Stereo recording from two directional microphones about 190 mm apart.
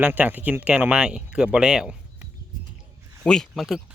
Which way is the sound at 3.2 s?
5° left (ahead or behind).